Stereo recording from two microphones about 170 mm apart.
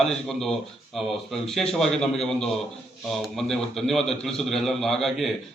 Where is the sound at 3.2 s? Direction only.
Centre (ahead or behind).